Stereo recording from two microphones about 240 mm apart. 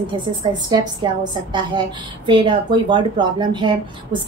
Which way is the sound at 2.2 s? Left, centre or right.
Centre.